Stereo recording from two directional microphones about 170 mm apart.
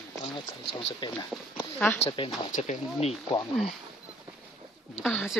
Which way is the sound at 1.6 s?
10° left (ahead or behind).